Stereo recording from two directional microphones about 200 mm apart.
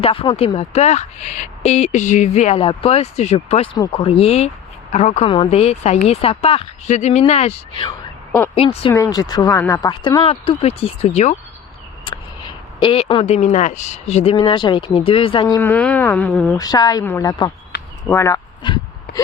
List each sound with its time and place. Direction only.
0.0 s speech: 25° left (ahead or behind)
8.9 s speech: 15° left (ahead or behind); by 11.3 s 35° left (ahead or behind)
12.8 s speech: 25° left (ahead or behind); by 16.6 s 5° left (ahead or behind)
16.6 s speech: 20° left (ahead or behind)
19.1 s a sound: 55° left (ahead or behind)